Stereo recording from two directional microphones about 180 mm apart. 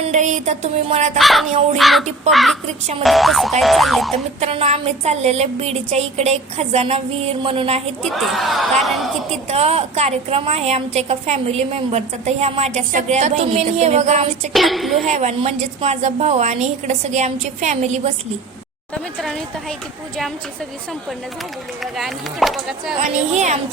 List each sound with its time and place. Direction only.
0.0 s a woman's voice: 40° right (ahead or behind)
1.2 s speech: centre (ahead or behind)
4.4 s a woman's voice: 35° right (ahead or behind)
8.1 s speech: centre (ahead or behind)
9.5 s a woman's voice: 35° right (ahead or behind)
14.5 s speech: centre (ahead or behind)
15.0 s a woman's voice: 40° right (ahead or behind)
21.9 s speech: centre (ahead or behind)
23.0 s a woman's voice: 40° right (ahead or behind)